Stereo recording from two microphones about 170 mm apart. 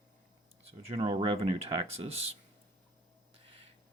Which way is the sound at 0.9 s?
30° right (ahead or behind).